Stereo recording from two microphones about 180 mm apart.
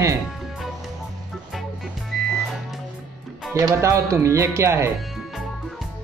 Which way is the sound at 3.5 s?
15° right (ahead or behind).